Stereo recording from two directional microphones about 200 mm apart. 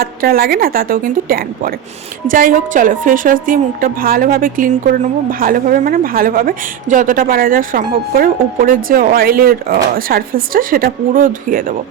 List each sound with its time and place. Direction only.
0.0 s speech: 50° right (ahead or behind)